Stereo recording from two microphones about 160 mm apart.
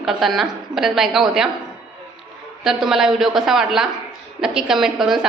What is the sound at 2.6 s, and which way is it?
Speech, 5° right (ahead or behind).